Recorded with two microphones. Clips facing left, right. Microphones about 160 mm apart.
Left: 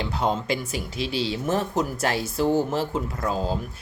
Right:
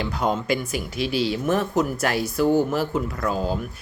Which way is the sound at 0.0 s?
30° left (ahead or behind).